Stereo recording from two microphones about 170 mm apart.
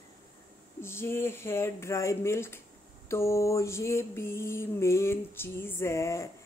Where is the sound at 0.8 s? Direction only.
15° left (ahead or behind).